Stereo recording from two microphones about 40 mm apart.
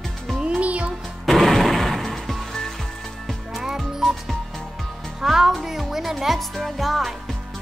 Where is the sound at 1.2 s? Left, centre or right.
Centre.